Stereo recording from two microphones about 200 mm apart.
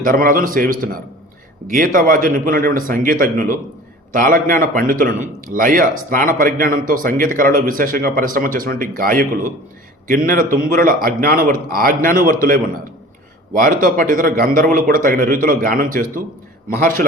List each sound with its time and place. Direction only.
0.0 s a man's voice: 45° right (ahead or behind)